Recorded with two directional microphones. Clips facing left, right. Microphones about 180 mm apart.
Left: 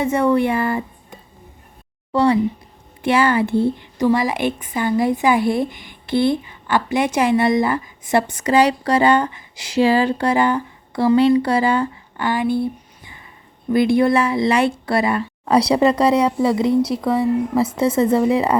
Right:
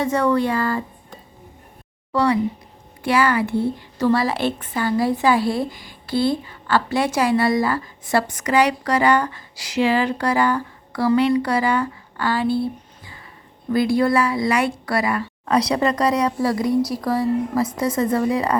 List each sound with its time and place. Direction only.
0.0 s a woman's voice: 25° left (ahead or behind)
2.1 s a woman's voice: 25° left (ahead or behind)
3.9 s a woman's voice: 15° left (ahead or behind)